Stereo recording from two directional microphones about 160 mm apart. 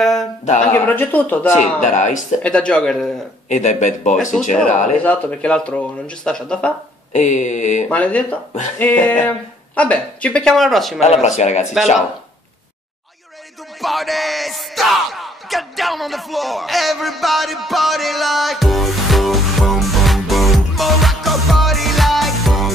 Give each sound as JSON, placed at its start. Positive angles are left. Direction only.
{"t": 0.0, "sound": "a sound", "side_deg": 0}
{"t": 0.7, "sound": "speech", "side_deg": 10}
{"t": 1.6, "sound": "speech", "side_deg": 50}
{"t": 2.4, "sound": "speech", "side_deg": 5}
{"t": 3.4, "sound": "speech", "side_deg": 50}
{"t": 5.0, "sound": "speech", "side_deg": 10}
{"t": 7.1, "sound": "speech", "side_deg": 50}
{"t": 7.9, "sound": "speech", "side_deg": 10}
{"t": 11.0, "sound": "speech", "side_deg": 45}
{"t": 13.7, "sound": "a sound", "side_deg": 0}